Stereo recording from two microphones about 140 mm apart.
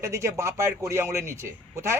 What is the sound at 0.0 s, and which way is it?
Speech, 20° right (ahead or behind).